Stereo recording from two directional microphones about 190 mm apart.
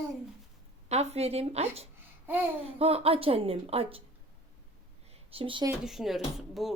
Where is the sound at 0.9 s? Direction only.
35° right (ahead or behind).